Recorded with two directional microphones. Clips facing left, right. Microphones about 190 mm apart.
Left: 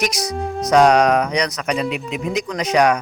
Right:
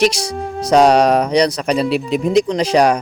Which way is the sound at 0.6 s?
30° right (ahead or behind).